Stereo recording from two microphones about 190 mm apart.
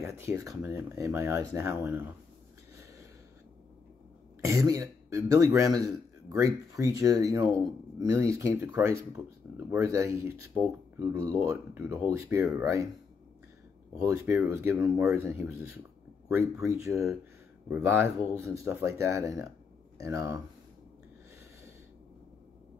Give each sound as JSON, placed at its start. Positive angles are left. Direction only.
{"t": 0.0, "sound": "speech", "side_deg": -15}
{"t": 4.4, "sound": "speech", "side_deg": -15}
{"t": 13.9, "sound": "speech", "side_deg": -15}